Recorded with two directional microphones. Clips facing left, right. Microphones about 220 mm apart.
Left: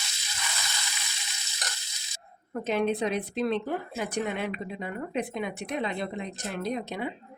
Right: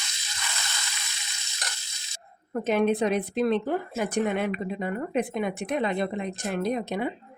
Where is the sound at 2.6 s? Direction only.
50° right (ahead or behind).